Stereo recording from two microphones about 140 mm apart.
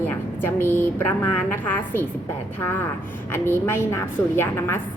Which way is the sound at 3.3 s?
15° left (ahead or behind).